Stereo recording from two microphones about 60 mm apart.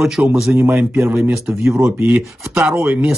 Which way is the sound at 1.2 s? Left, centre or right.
Right.